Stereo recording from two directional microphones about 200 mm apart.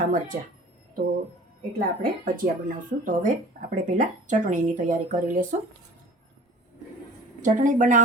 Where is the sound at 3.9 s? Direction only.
40° right (ahead or behind).